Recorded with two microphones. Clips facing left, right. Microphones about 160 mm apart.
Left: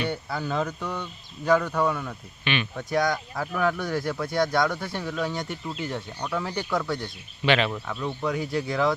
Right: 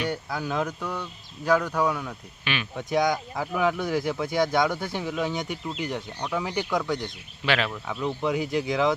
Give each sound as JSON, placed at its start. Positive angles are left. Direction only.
{"t": 0.0, "sound": "speech", "side_deg": -10}
{"t": 3.8, "sound": "speech", "side_deg": 0}
{"t": 5.2, "sound": "speech", "side_deg": -20}
{"t": 6.1, "sound": "speech", "side_deg": -5}
{"t": 6.7, "sound": "speech", "side_deg": 0}
{"t": 7.9, "sound": "speech", "side_deg": -15}